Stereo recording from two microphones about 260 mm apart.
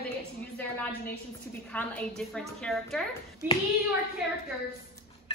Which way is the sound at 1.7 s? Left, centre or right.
Centre.